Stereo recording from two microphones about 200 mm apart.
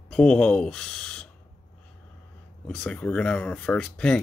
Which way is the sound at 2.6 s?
5° left (ahead or behind).